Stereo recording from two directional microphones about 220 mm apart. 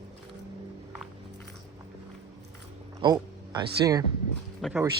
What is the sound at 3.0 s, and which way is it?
Speech, 20° right (ahead or behind).